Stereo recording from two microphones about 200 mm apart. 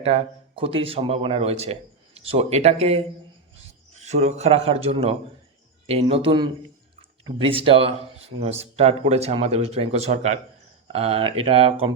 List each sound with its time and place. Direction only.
0.0 s speech: 30° right (ahead or behind)